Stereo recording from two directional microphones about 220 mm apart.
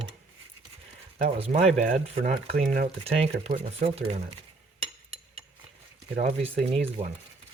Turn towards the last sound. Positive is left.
turn(degrees=-25)  # may be behind; listen again after turning